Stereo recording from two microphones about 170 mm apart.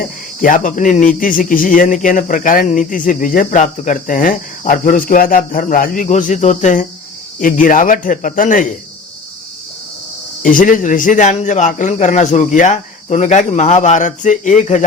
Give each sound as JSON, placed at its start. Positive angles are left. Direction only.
{"t": 0.4, "sound": "speech", "side_deg": 50}
{"t": 10.4, "sound": "speech", "side_deg": 55}